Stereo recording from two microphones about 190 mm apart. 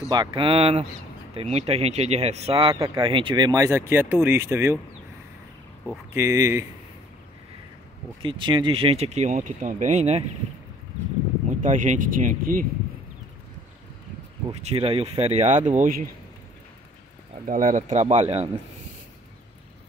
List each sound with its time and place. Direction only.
0.1 s speech: 25° right (ahead or behind)
6.1 s speech: 15° right (ahead or behind)
8.2 s speech: 25° right (ahead or behind)
11.6 s speech: 40° right (ahead or behind)
14.5 s speech: 35° right (ahead or behind)
17.5 s speech: 45° right (ahead or behind)